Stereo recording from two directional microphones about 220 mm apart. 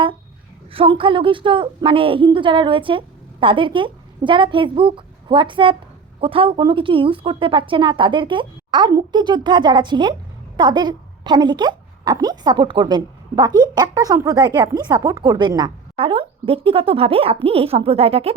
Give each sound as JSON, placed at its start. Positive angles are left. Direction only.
{"t": 0.7, "sound": "a woman's voice", "side_deg": -25}